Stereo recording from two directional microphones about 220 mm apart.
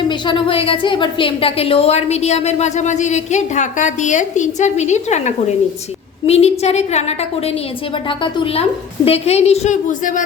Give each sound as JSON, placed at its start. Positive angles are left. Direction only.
{"t": 0.1, "sound": "a woman's voice", "side_deg": 20}
{"t": 8.2, "sound": "a woman's voice", "side_deg": 20}